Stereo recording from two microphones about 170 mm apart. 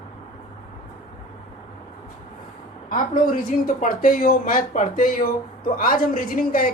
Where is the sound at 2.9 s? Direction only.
55° left (ahead or behind).